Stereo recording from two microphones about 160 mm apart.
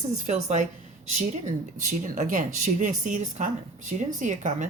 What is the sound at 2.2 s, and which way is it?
A woman's voice, 50° right (ahead or behind).